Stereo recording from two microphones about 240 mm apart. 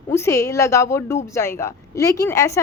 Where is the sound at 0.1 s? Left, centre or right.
Centre.